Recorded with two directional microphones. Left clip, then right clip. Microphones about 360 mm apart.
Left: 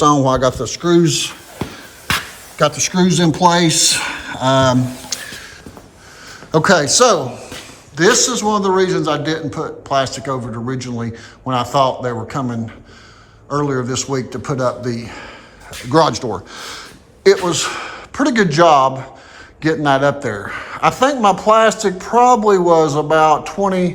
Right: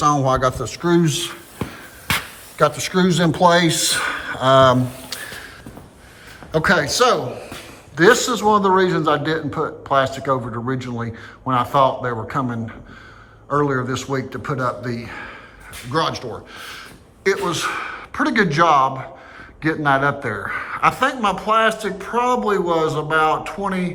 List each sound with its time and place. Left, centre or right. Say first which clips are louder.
0.0 s a man's voice: left 4 dB; centre
6.5 s a man's voice: left 4 dB; centre